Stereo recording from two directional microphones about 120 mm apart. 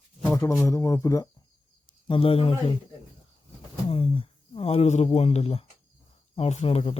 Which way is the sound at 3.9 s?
50° left (ahead or behind).